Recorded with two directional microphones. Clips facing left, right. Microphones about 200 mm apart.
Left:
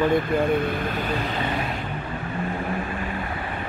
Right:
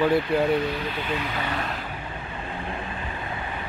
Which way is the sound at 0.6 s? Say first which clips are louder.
Left 2 dB; 50° left (ahead or behind).